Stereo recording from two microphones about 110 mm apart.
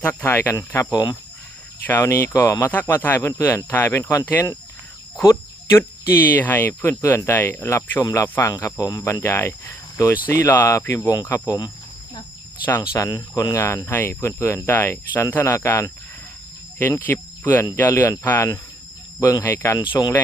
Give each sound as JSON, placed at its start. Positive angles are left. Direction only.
{"t": 0.0, "sound": "speech", "side_deg": 15}
{"t": 1.9, "sound": "speech", "side_deg": 20}
{"t": 6.9, "sound": "speech", "side_deg": 30}
{"t": 8.5, "sound": "speech", "side_deg": 35}
{"t": 12.9, "sound": "speech", "side_deg": 30}
{"t": 13.6, "sound": "speech", "side_deg": 25}
{"t": 17.1, "sound": "cricket", "side_deg": 15}
{"t": 17.7, "sound": "speech", "side_deg": 15}